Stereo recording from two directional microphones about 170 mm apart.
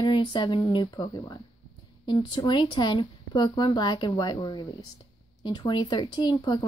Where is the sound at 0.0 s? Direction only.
25° left (ahead or behind).